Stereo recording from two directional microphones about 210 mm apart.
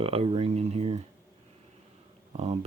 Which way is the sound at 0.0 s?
25° right (ahead or behind).